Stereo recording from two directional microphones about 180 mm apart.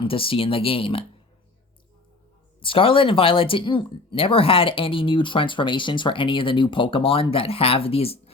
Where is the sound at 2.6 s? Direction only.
30° left (ahead or behind).